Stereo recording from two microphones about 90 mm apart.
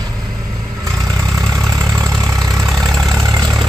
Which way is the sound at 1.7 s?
40° right (ahead or behind).